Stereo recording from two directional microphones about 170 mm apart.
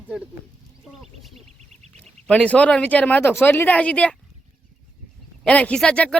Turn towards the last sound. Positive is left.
turn(degrees=5)  # may be behind; listen again after turning